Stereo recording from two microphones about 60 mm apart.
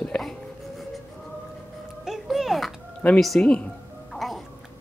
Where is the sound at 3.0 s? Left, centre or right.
Left.